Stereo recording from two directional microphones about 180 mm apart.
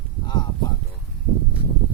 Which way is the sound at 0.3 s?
25° left (ahead or behind).